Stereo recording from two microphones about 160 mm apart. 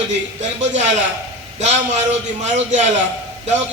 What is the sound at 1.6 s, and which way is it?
A man's voice, 45° right (ahead or behind).